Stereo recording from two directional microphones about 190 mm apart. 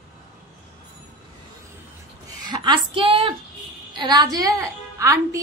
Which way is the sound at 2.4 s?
25° right (ahead or behind).